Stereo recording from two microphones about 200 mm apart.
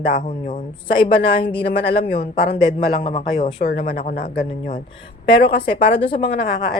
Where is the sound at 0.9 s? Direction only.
25° left (ahead or behind).